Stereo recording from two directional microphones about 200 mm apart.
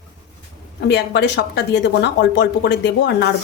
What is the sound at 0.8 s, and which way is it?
Speech, 55° left (ahead or behind).